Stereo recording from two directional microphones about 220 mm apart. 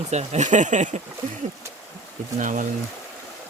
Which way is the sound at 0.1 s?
30° right (ahead or behind).